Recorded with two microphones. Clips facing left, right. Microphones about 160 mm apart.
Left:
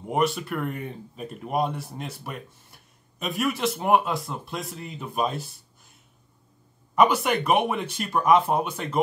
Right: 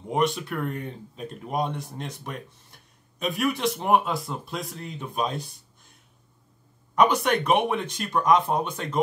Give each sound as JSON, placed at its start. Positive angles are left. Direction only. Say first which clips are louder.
{"t": 0.1, "sound": "speech", "louder": "even", "side_deg": 5}
{"t": 7.0, "sound": "speech", "louder": "even", "side_deg": 5}